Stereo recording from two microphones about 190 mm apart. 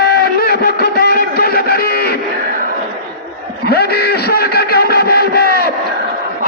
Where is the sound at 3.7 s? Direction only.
55° left (ahead or behind).